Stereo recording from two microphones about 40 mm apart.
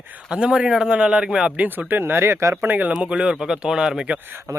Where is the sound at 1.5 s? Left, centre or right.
Right.